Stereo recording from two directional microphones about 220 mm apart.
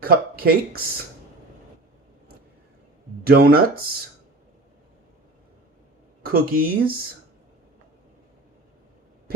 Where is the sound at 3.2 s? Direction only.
45° right (ahead or behind).